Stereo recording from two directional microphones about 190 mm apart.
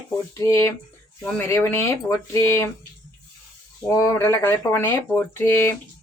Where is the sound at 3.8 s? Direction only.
15° left (ahead or behind).